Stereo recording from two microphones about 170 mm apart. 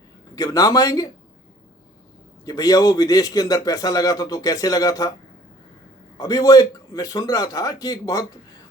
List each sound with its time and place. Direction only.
0.3 s a man's voice: 20° left (ahead or behind)
2.4 s a man's voice: 20° left (ahead or behind)
6.1 s a man's voice: 20° left (ahead or behind)